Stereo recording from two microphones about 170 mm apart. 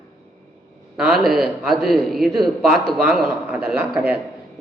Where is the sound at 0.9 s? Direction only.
Centre (ahead or behind).